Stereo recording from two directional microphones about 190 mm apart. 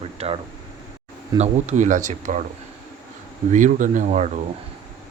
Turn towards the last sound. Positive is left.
turn(degrees=-40)  # may be behind; listen again after turning